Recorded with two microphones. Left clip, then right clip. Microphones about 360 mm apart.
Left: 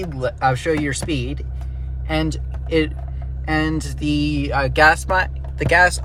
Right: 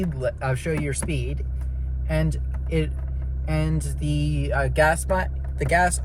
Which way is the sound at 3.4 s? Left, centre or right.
Left.